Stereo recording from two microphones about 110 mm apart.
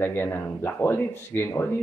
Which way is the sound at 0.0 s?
20° left (ahead or behind).